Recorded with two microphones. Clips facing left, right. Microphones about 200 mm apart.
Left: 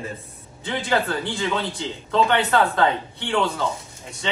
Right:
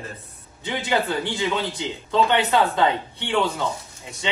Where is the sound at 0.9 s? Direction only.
15° right (ahead or behind).